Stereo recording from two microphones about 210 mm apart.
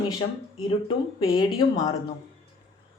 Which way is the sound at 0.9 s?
20° left (ahead or behind).